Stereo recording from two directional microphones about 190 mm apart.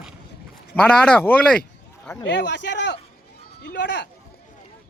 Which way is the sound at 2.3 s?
70° left (ahead or behind).